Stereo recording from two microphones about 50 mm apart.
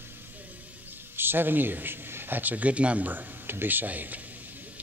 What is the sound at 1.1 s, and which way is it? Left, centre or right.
A man's voice, right.